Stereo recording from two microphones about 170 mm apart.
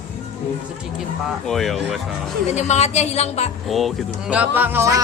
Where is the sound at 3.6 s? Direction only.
Centre (ahead or behind); by 5.0 s 15° right (ahead or behind).